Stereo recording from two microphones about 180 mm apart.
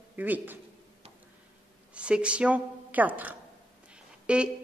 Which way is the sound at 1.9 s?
5° right (ahead or behind).